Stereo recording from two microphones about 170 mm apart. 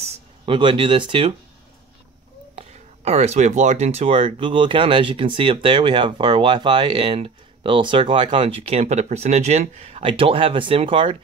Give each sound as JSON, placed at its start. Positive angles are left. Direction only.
{"t": 0.0, "sound": "speech", "side_deg": -30}
{"t": 2.5, "sound": "speech", "side_deg": -40}